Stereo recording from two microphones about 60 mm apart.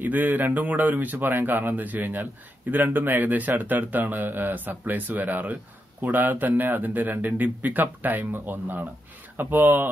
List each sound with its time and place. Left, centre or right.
0.0 s speech: right